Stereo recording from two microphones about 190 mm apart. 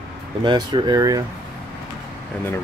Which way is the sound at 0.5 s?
25° right (ahead or behind).